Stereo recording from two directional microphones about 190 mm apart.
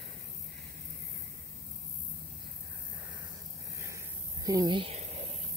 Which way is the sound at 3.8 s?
15° right (ahead or behind).